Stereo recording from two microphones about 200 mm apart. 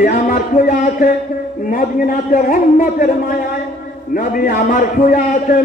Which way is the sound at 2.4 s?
40° left (ahead or behind).